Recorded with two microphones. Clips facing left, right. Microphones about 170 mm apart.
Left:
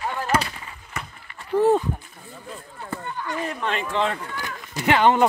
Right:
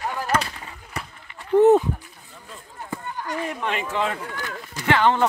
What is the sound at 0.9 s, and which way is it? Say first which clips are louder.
Run: right 1 dB; 35° right (ahead or behind).